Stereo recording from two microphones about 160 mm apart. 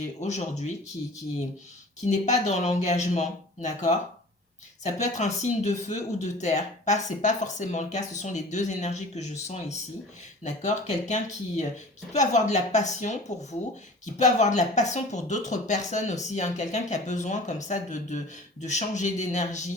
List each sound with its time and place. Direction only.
0.2 s speech: 45° left (ahead or behind)
2.0 s speech: 50° left (ahead or behind)